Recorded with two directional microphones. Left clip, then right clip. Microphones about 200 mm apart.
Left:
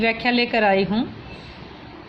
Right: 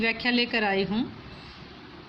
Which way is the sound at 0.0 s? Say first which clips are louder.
Left 5 dB; 15° right (ahead or behind).